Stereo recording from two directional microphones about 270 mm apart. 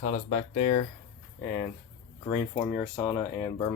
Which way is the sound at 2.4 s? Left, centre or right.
Centre.